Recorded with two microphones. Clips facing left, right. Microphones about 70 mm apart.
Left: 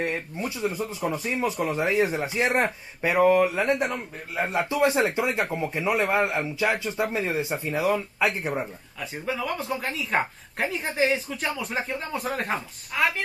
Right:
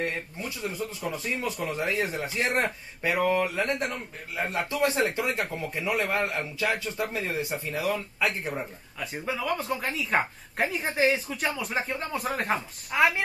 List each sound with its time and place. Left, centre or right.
0.0 s speech: left
9.0 s speech: centre
12.9 s speech: centre